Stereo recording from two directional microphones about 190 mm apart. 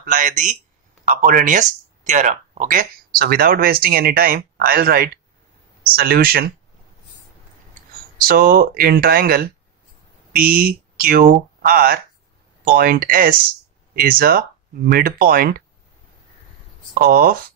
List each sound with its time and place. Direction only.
0.0 s speech: 45° right (ahead or behind)
8.2 s speech: 50° right (ahead or behind)
16.9 s speech: 50° right (ahead or behind)